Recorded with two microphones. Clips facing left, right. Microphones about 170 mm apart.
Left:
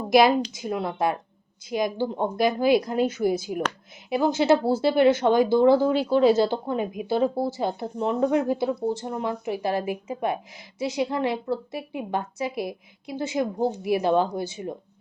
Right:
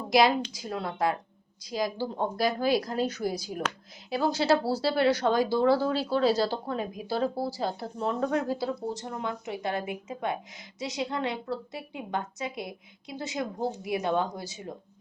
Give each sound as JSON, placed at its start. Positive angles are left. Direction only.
{"t": 0.1, "sound": "a woman's voice", "side_deg": 25}
{"t": 4.1, "sound": "a woman's voice", "side_deg": 20}